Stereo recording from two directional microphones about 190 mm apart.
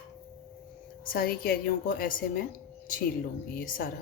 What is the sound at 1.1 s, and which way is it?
A woman's voice, 50° left (ahead or behind).